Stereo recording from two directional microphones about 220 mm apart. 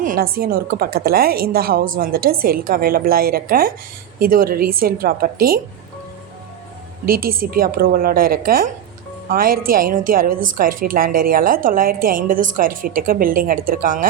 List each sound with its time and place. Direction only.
0.0 s a woman's voice: 40° right (ahead or behind)
7.0 s a woman's voice: 40° right (ahead or behind)